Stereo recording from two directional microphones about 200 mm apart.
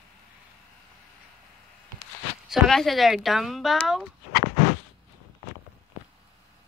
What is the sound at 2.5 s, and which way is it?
Speech, centre (ahead or behind).